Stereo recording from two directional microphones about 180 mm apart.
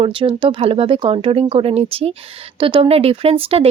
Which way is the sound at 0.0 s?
30° right (ahead or behind).